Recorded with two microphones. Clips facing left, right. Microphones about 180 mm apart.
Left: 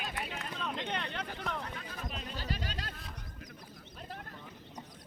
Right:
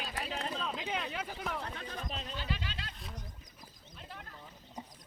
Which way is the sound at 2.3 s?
40° left (ahead or behind).